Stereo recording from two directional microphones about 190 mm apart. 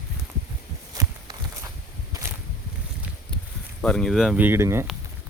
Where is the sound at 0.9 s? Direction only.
20° right (ahead or behind).